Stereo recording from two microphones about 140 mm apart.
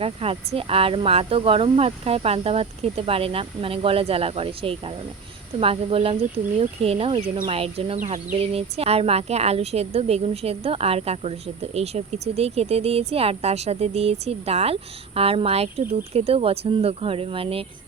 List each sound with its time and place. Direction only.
0.0 s speech: 45° right (ahead or behind)
7.9 s speech: 60° right (ahead or behind); by 17.7 s 40° right (ahead or behind)